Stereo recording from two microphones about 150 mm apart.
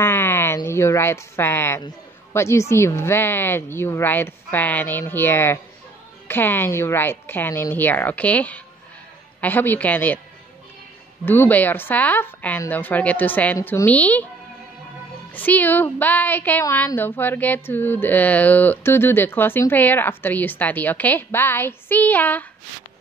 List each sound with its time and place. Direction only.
0.0 s a sound: 15° left (ahead or behind)
0.7 s a woman's voice: 15° left (ahead or behind)
11.2 s a woman's voice: 15° left (ahead or behind)
13.8 s a woman's voice: 10° left (ahead or behind)
15.3 s a woman's voice: 10° left (ahead or behind)